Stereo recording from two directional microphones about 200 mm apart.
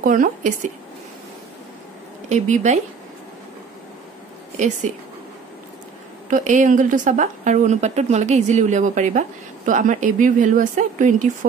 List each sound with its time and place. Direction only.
0.0 s a woman's voice: 40° right (ahead or behind)
2.2 s a woman's voice: 35° right (ahead or behind)
4.6 s a woman's voice: 40° right (ahead or behind)
6.3 s a woman's voice: 40° right (ahead or behind)